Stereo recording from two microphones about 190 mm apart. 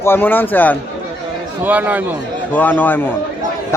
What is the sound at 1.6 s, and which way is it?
Speech, 10° right (ahead or behind).